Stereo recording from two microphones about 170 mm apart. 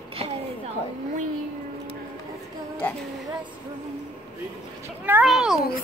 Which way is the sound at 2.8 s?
10° left (ahead or behind).